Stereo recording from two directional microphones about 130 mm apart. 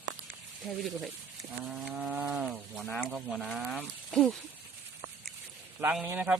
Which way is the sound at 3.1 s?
5° right (ahead or behind).